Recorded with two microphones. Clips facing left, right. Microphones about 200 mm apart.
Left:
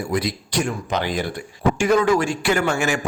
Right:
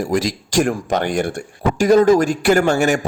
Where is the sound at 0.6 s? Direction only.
50° right (ahead or behind).